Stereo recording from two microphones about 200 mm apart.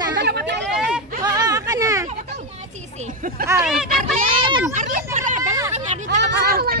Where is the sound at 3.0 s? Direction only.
45° right (ahead or behind).